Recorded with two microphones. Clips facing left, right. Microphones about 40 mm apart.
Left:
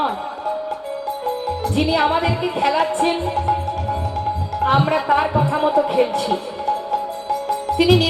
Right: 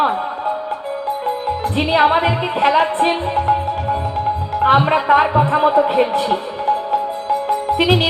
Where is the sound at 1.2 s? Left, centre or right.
Right.